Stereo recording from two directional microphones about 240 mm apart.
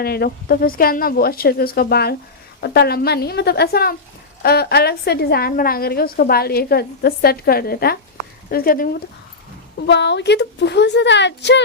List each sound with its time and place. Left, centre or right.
0.0 s a woman's voice: left
9.8 s a woman's voice: left